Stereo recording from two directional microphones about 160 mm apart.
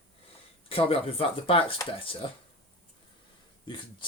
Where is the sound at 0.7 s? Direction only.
35° left (ahead or behind).